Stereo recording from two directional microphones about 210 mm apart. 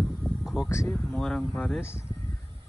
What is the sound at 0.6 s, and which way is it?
Speech, 10° left (ahead or behind).